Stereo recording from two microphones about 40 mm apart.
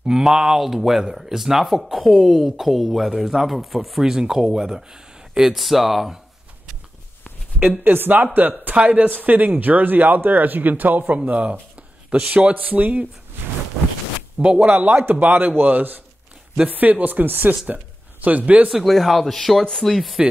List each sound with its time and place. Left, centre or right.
0.2 s speech: centre
4.0 s speech: centre
5.6 s speech: centre
7.8 s speech: right
8.7 s speech: right
9.2 s speech: right
11.2 s speech: right
14.4 s speech: right
15.0 s speech: right
18.7 s speech: centre